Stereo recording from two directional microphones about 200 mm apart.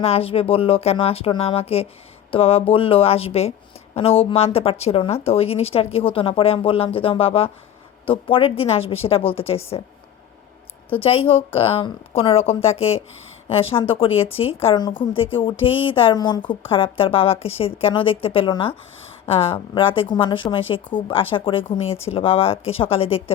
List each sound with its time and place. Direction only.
0.0 s a woman's voice: 30° left (ahead or behind)
10.8 s a woman's voice: 25° left (ahead or behind)